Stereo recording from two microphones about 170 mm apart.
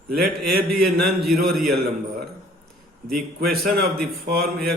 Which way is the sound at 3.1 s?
60° right (ahead or behind).